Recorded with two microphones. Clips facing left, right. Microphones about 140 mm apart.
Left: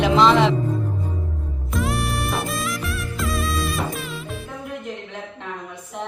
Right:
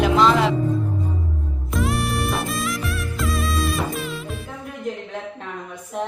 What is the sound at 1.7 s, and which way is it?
Music, centre (ahead or behind).